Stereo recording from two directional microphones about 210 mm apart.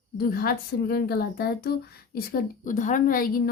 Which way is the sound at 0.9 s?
50° left (ahead or behind).